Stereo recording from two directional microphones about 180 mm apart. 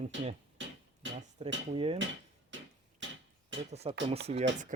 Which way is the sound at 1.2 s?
35° right (ahead or behind).